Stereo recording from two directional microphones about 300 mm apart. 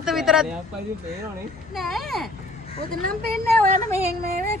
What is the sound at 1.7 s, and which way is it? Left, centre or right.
Speech, centre.